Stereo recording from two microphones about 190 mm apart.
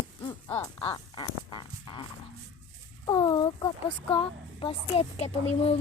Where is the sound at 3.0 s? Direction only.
20° left (ahead or behind).